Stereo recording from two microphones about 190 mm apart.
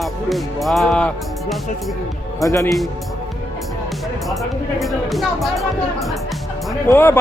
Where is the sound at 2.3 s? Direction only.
15° left (ahead or behind).